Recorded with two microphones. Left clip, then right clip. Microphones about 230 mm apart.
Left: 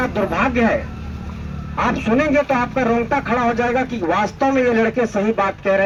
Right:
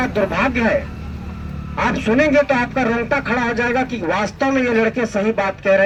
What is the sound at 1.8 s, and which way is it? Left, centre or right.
Speech, right.